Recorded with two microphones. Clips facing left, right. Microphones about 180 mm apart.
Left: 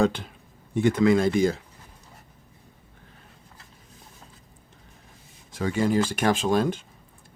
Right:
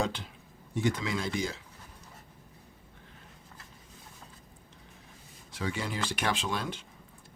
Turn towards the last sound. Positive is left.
turn(degrees=45)  # may be behind; listen again after turning